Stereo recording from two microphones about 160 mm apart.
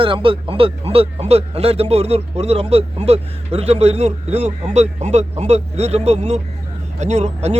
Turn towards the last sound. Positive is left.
turn(degrees=-45)  # may be behind; listen again after turning